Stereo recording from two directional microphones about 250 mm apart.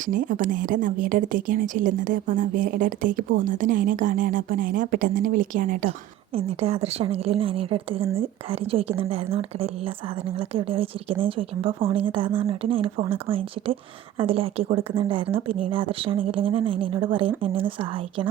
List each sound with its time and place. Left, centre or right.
0.0 s speech: right
6.3 s a woman's voice: right